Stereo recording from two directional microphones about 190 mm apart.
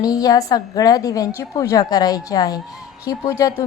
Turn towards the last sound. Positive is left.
turn(degrees=15)  # may be behind; listen again after turning